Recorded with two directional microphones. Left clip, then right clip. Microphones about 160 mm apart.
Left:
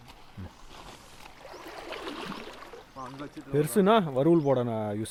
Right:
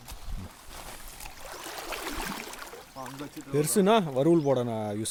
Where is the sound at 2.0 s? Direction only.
45° right (ahead or behind).